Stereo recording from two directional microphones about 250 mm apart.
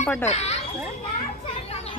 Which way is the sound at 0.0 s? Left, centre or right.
Centre.